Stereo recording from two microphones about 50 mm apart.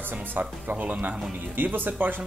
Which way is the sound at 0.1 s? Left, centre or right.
Right.